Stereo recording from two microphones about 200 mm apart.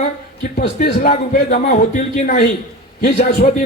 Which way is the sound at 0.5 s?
50° left (ahead or behind).